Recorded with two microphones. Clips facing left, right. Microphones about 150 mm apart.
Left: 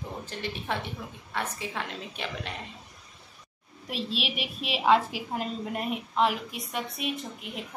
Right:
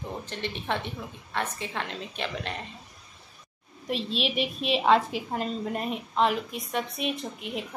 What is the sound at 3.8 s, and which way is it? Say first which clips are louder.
A woman's voice: right 3 dB; 5° left (ahead or behind).